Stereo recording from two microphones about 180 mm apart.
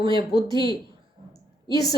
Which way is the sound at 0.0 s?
25° right (ahead or behind).